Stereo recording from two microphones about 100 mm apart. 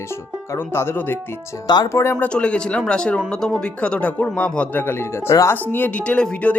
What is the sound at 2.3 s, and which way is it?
Speech, 10° left (ahead or behind).